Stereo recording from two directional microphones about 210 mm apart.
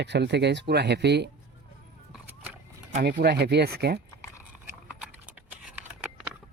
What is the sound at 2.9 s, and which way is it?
Speech, 45° right (ahead or behind).